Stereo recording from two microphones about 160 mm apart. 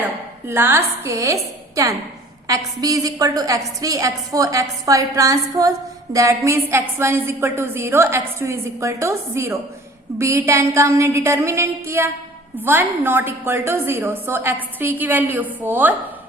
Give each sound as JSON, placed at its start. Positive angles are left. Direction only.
{"t": 0.0, "sound": "a woman's voice", "side_deg": -15}